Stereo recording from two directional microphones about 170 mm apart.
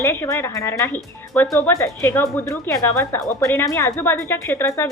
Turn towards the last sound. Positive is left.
turn(degrees=15)  # may be behind; listen again after turning